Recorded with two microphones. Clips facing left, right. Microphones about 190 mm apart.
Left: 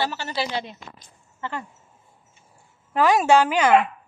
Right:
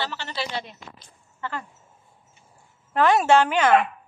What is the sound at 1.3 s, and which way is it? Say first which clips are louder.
Speech: left 1 dB; 20° left (ahead or behind).